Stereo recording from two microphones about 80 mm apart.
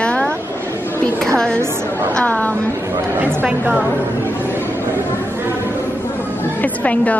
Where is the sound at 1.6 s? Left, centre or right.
Right.